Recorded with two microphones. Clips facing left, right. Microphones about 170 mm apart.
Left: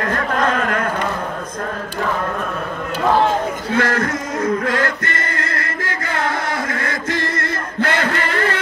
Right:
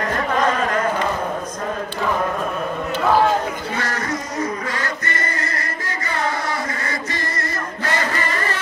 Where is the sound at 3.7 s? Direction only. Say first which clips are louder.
Left 6 dB; 55° left (ahead or behind).